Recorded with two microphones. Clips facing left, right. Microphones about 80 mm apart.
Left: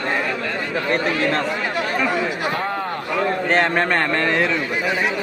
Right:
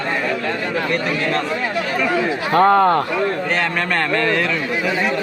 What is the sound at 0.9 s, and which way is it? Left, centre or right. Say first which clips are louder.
Speech: left 3 dB; left.